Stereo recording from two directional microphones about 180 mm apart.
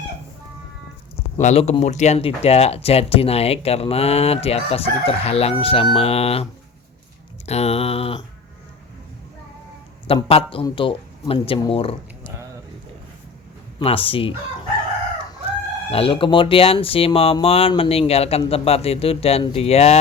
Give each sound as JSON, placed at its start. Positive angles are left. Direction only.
{"t": 1.4, "sound": "speech", "side_deg": 40}
{"t": 10.2, "sound": "speech", "side_deg": 30}
{"t": 13.7, "sound": "speech", "side_deg": 30}
{"t": 15.9, "sound": "speech", "side_deg": 30}